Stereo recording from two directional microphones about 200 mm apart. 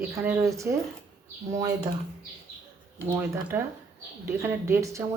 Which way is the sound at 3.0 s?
10° right (ahead or behind).